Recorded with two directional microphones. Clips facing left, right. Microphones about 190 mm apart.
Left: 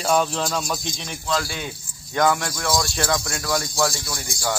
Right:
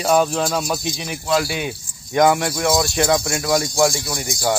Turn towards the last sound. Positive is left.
turn(degrees=-20)  # may be behind; listen again after turning